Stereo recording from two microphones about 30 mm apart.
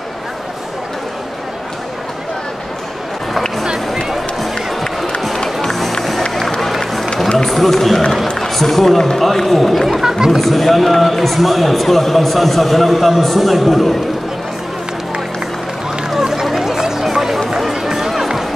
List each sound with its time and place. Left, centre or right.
5.6 s music: centre
7.4 s a man's voice: centre
9.2 s a man's voice: centre
10.0 s speech: centre
10.4 s a man's voice: centre
16.1 s run: centre
16.5 s a sound: centre
17.0 s music: centre
17.5 s run: centre